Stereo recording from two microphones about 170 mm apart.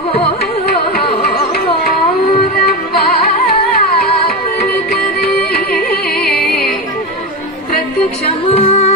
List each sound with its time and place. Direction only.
5.9 s music: 65° left (ahead or behind)
8.5 s music: 35° left (ahead or behind)